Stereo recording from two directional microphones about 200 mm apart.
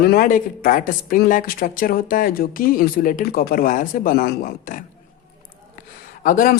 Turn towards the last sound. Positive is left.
turn(degrees=45)  # may be behind; listen again after turning